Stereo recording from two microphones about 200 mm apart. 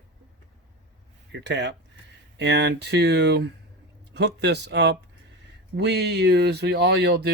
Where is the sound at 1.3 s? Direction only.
60° right (ahead or behind).